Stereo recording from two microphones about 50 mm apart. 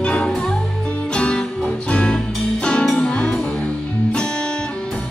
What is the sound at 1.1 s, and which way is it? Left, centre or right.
Music, centre.